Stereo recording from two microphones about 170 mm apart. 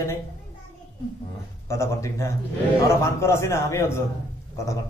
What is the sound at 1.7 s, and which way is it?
A man's voice, 15° left (ahead or behind).